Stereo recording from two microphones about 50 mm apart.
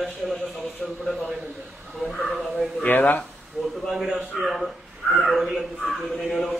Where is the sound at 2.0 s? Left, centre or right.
Centre.